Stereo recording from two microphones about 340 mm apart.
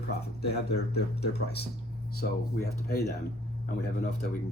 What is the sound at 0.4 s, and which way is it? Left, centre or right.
Speech, left.